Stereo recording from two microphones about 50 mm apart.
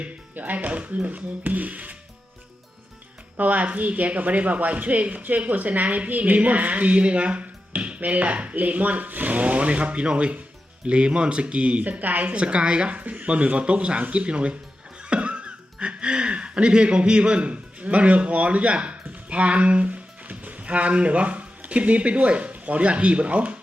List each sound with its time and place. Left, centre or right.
0.0 s speech: right
3.3 s a woman's voice: right